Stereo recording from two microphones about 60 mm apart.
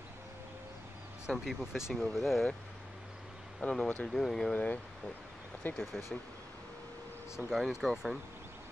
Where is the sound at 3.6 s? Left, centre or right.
Centre.